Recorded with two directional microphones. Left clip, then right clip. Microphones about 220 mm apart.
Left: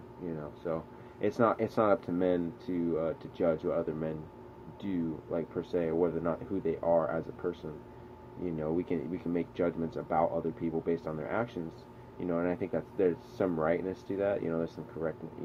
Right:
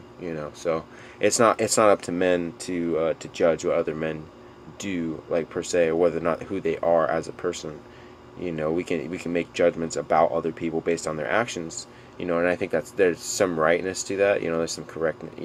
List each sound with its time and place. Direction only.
1.2 s speech: 15° right (ahead or behind)
8.4 s speech: 15° right (ahead or behind)